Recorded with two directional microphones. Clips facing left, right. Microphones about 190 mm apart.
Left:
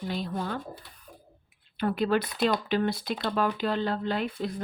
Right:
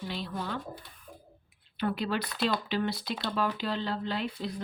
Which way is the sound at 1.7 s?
50° left (ahead or behind).